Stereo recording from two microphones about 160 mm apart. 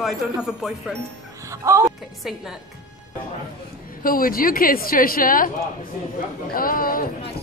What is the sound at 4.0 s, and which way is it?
A woman's voice, 60° left (ahead or behind).